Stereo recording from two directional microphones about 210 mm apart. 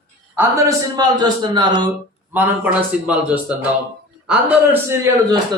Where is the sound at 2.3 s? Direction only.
10° right (ahead or behind).